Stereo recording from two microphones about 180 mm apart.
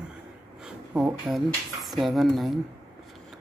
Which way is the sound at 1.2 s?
Centre (ahead or behind).